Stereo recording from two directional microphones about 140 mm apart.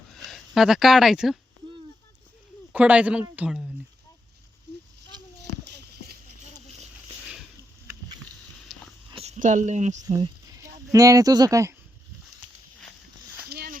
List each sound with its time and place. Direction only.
0.2 s speech: centre (ahead or behind)
2.7 s a man's voice: 10° right (ahead or behind)
8.7 s a sound: centre (ahead or behind)
9.0 s speech: 45° right (ahead or behind)
10.0 s speech: 25° right (ahead or behind)